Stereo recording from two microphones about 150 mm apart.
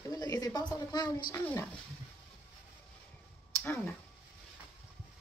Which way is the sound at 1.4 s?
10° left (ahead or behind).